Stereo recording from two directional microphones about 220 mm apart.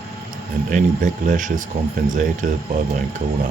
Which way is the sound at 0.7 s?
35° right (ahead or behind).